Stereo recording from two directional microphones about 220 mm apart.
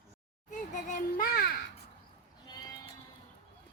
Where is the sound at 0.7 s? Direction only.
35° left (ahead or behind).